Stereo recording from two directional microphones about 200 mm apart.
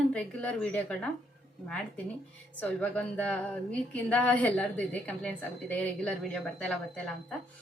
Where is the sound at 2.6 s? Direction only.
10° left (ahead or behind).